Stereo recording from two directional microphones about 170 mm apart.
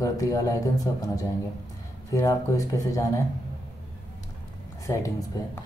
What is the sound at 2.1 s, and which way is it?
Speech, 20° left (ahead or behind).